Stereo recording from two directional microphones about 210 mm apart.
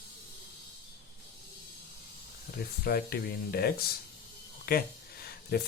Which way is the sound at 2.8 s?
45° left (ahead or behind).